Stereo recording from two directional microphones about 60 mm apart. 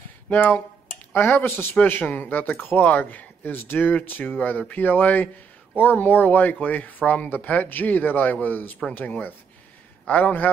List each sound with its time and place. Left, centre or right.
1.1 s speech: left
10.0 s speech: left